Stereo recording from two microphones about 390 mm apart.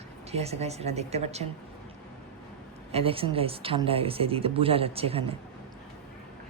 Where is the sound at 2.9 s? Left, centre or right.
Centre.